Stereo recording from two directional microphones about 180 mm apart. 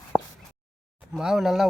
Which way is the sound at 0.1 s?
20° left (ahead or behind).